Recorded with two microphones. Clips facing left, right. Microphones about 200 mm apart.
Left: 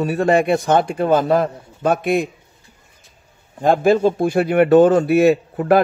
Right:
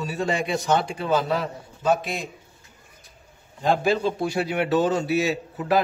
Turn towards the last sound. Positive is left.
turn(degrees=55)  # may be behind; listen again after turning